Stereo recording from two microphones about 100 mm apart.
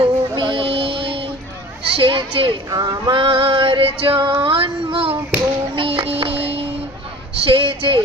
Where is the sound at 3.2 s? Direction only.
65° right (ahead or behind).